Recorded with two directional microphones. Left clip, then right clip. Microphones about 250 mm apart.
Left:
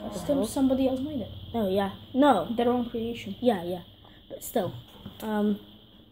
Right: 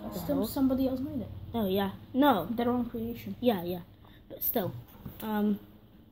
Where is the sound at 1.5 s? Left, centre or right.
Centre.